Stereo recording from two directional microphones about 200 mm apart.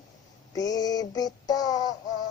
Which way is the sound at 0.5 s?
20° left (ahead or behind).